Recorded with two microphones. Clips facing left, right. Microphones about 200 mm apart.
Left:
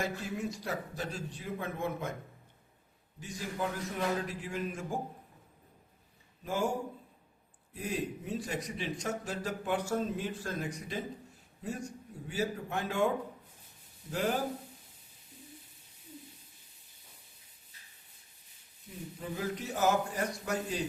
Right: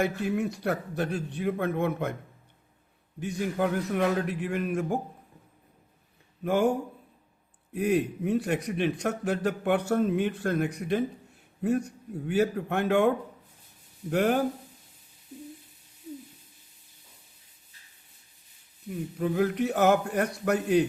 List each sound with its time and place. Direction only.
0.0 s a man's voice: 65° right (ahead or behind)
3.2 s a man's voice: 60° right (ahead or behind)
6.4 s a man's voice: 60° right (ahead or behind)
19.2 s a man's voice: 65° right (ahead or behind)